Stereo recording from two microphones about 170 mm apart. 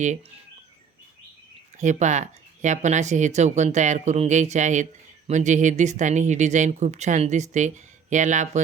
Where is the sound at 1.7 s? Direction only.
45° right (ahead or behind).